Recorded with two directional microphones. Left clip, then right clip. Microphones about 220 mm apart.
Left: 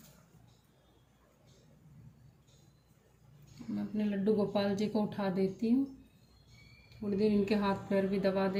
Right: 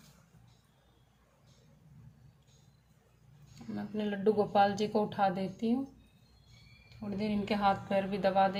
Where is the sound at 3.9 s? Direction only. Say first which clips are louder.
Right 2 dB; 50° right (ahead or behind).